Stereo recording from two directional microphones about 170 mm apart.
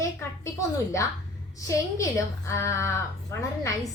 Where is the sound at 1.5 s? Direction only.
20° left (ahead or behind).